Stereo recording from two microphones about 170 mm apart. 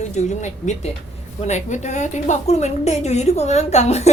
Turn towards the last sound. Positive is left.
turn(degrees=40)  # may be behind; listen again after turning